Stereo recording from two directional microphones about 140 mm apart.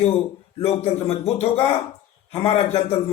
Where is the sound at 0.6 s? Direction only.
45° left (ahead or behind).